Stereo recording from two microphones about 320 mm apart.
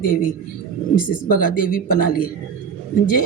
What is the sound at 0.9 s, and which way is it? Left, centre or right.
Speech, left.